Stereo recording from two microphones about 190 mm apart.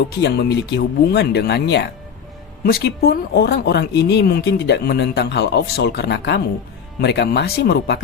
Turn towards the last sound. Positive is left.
turn(degrees=60)  # may be behind; listen again after turning